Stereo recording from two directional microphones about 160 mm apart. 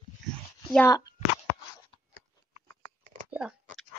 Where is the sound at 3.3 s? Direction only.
5° right (ahead or behind).